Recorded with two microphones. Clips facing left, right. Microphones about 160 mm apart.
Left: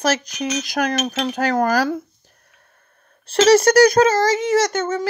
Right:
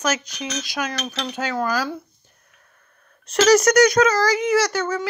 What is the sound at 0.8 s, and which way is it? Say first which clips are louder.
Cutlery: left 7 dB; 60° left (ahead or behind).